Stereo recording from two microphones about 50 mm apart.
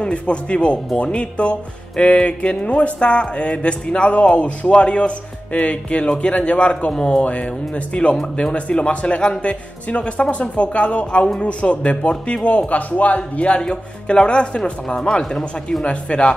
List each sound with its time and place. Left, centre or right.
0.0 s speech: left